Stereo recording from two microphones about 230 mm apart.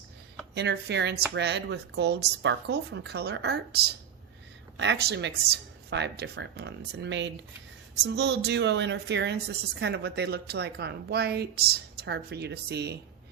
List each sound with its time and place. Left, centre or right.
0.5 s a woman's voice: right